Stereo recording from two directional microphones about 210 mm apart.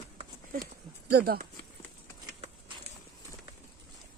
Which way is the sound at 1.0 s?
45° right (ahead or behind).